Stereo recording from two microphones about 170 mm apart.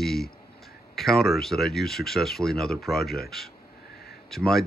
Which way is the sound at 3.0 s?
65° left (ahead or behind).